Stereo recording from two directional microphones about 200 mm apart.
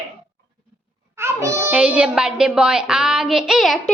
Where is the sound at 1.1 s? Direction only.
15° right (ahead or behind).